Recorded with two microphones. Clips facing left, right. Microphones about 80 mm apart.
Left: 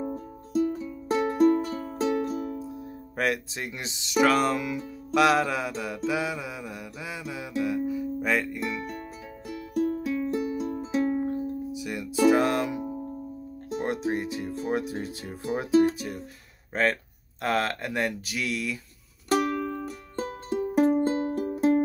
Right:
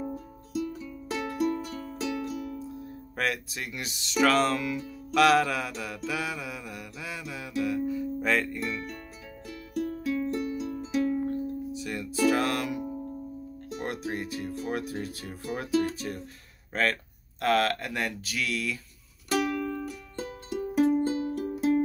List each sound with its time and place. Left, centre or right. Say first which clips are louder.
0.0 s music: left 3 dB; left
2.6 s speech: left 2 dB; centre
5.1 s mantra: even; centre
9.5 s music: left 5 dB; left
10.6 s music: left 2 dB; left
11.2 s music: left 1 dB; centre
13.7 s speech: left 6 dB; left
19.2 s music: left 3 dB; left